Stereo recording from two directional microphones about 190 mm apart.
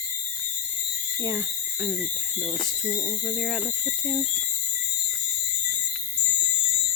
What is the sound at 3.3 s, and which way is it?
Speech, centre (ahead or behind).